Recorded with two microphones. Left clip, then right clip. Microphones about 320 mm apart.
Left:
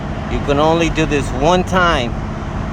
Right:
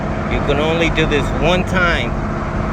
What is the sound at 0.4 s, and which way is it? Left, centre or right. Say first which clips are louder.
Speech: left 3 dB; centre.